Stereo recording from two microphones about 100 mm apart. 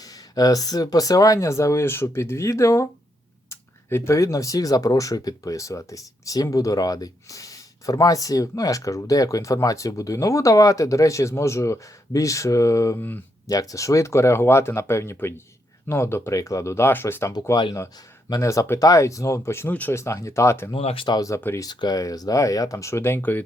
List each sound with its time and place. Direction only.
0.0 s speech: 40° left (ahead or behind)
18.3 s speech: 35° left (ahead or behind)
20.7 s speech: 65° left (ahead or behind)
21.1 s speech: 35° left (ahead or behind)
21.6 s speech: 45° left (ahead or behind); by 23.4 s 20° left (ahead or behind)